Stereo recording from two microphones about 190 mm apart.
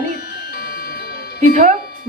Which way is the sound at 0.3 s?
50° left (ahead or behind).